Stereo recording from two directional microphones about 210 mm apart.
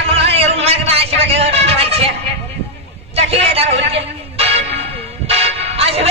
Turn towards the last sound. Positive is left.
turn(degrees=-30)  # may be behind; listen again after turning